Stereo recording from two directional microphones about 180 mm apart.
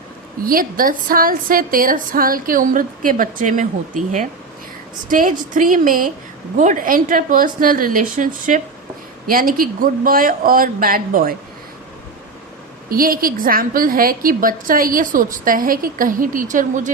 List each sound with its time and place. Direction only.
0.4 s a woman's voice: 50° right (ahead or behind)
12.9 s a woman's voice: 55° right (ahead or behind)